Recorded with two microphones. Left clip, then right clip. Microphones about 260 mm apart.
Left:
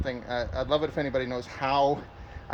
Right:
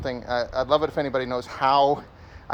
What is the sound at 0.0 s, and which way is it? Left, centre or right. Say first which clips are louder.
Speech: right 5 dB; centre.